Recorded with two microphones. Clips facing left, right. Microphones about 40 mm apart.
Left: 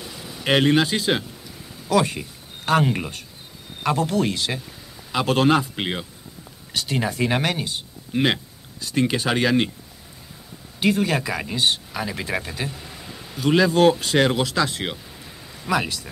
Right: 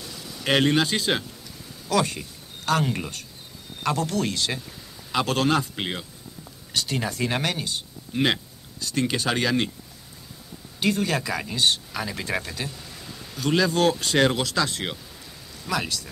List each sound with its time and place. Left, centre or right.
0.0 s a sound: left
3.8 s speech: centre
10.8 s speech: centre